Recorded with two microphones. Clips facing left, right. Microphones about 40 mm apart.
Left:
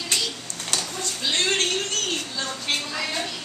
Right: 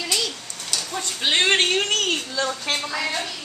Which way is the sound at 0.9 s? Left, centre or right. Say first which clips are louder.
Right 6 dB; right.